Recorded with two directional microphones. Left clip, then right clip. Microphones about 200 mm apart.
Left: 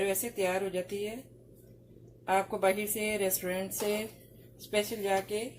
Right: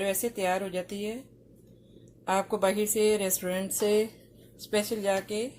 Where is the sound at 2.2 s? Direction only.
55° right (ahead or behind).